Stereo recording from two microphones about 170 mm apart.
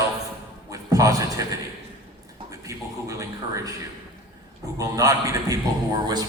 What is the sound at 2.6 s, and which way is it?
A man's voice, 20° right (ahead or behind).